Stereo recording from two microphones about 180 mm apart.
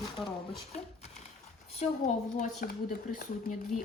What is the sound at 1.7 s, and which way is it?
A woman's voice, 40° left (ahead or behind).